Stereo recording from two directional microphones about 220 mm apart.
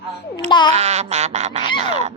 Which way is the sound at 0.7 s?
30° right (ahead or behind).